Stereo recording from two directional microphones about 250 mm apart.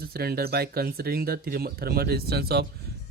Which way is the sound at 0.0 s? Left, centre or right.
Right.